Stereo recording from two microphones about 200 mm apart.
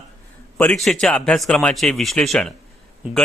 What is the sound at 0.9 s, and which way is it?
Speech, 5° left (ahead or behind).